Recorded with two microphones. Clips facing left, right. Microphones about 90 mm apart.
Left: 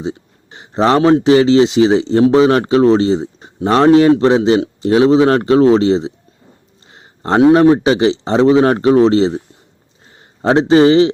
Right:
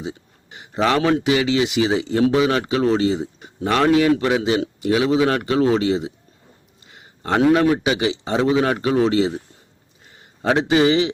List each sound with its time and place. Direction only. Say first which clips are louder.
0.0 s a man's voice: left 7 dB; 30° left (ahead or behind)